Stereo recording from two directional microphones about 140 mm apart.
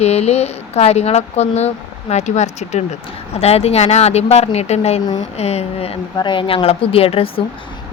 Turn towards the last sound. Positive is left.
turn(degrees=45)  # may be behind; listen again after turning